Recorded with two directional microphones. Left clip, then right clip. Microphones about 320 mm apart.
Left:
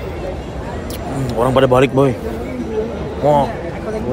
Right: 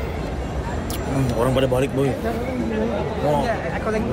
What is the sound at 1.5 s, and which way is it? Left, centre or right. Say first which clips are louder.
Speech: left 8 dB; left.